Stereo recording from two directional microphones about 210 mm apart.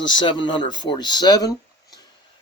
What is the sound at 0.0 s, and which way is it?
Speech, 20° left (ahead or behind).